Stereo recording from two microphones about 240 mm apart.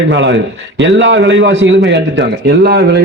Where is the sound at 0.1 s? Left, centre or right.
Right.